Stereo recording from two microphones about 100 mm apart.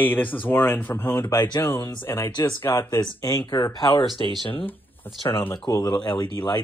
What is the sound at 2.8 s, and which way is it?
Speech, 35° left (ahead or behind).